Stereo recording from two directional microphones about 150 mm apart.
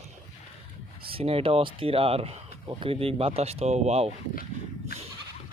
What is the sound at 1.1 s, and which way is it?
Speech, 40° right (ahead or behind).